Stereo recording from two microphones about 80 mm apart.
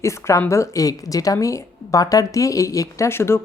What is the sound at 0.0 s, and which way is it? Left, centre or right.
A woman's voice, left.